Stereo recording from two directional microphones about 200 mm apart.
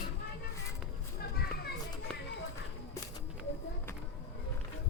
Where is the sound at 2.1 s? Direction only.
5° left (ahead or behind).